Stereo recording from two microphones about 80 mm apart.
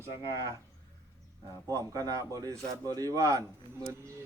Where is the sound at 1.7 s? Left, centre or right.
Right.